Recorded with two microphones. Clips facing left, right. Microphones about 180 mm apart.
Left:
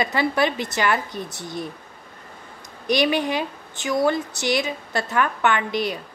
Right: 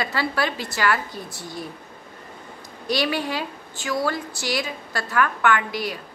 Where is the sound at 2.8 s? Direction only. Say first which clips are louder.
Left 4 dB; 20° left (ahead or behind).